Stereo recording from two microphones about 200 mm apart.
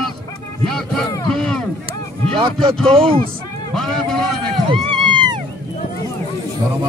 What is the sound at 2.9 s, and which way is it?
Speech, 25° right (ahead or behind).